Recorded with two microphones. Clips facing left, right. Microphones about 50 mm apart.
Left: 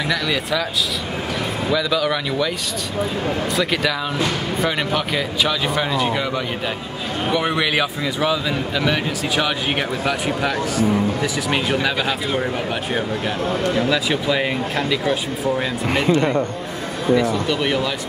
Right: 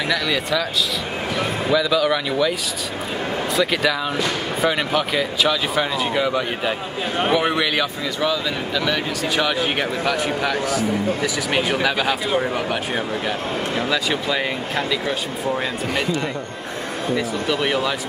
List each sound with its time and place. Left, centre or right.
0.1 s speech: centre
1.7 s speech: centre
3.5 s speech: centre
7.7 s a man's voice: centre
9.3 s speech: centre
13.8 s speech: centre
15.9 s speech: left
17.2 s speech: centre